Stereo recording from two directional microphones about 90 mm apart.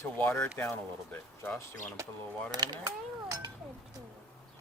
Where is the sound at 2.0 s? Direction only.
35° right (ahead or behind).